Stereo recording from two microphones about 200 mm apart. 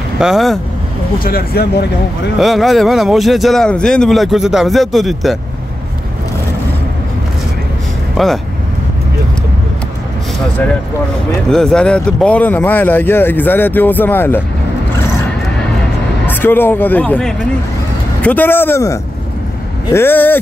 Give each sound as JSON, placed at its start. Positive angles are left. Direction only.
{"t": 0.2, "sound": "a man's voice", "side_deg": 0}
{"t": 1.2, "sound": "speech", "side_deg": 50}
{"t": 2.3, "sound": "a man's voice", "side_deg": 0}
{"t": 8.2, "sound": "speech", "side_deg": 0}
{"t": 11.5, "sound": "speech", "side_deg": 5}
{"t": 16.3, "sound": "speech", "side_deg": 10}